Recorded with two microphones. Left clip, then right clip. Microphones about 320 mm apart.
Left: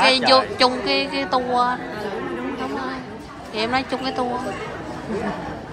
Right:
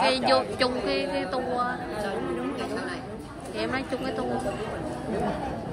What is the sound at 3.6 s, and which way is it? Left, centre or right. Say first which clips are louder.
Speech: left 7 dB; centre.